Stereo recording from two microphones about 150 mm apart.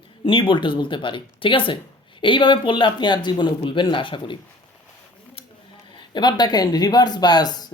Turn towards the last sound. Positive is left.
turn(degrees=25)  # may be behind; listen again after turning